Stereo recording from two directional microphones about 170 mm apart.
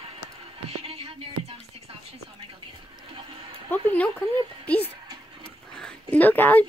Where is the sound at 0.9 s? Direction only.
35° right (ahead or behind).